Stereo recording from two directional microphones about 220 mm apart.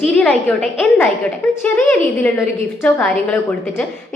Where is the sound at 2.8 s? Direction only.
5° left (ahead or behind).